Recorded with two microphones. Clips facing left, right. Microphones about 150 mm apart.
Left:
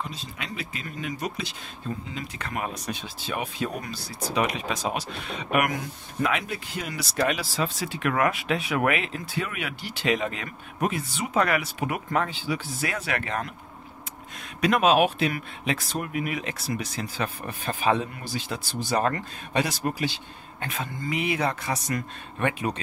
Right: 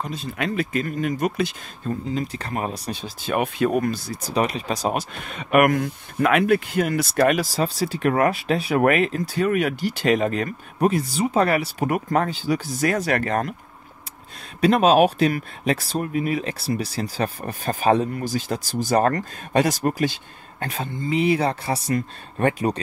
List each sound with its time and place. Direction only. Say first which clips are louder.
0.0 s speech: right 8 dB; 55° right (ahead or behind)
2.0 s speech: right 8 dB; 35° right (ahead or behind)
3.2 s speech: right 10 dB; 55° right (ahead or behind)
14.6 s speech: right 5 dB; 35° right (ahead or behind)
20.6 s speech: right 4 dB; 30° right (ahead or behind)